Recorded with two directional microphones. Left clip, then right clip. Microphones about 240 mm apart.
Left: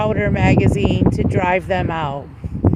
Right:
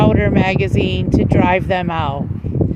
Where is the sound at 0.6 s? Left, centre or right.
Right.